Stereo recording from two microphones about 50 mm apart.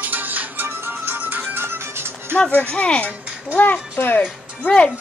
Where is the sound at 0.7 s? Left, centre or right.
Right.